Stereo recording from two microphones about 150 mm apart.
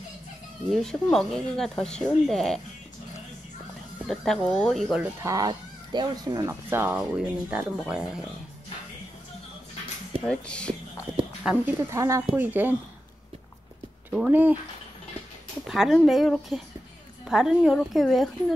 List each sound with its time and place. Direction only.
0.7 s speech: 5° left (ahead or behind)
4.1 s speech: 5° left (ahead or behind)
5.0 s speech: 20° right (ahead or behind)
6.5 s speech: 15° right (ahead or behind)
10.2 s speech: 5° left (ahead or behind)
11.2 s a sound: 35° right (ahead or behind)
11.9 s speech: 20° right (ahead or behind)
14.1 s speech: 10° right (ahead or behind)
15.6 s speech: 5° right (ahead or behind)